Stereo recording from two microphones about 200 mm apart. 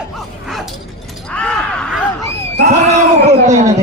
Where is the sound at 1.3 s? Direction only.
5° left (ahead or behind).